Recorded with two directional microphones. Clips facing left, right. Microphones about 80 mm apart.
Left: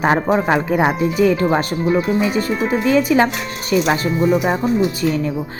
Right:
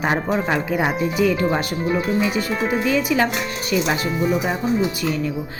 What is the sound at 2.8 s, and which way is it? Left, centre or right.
Speech, left.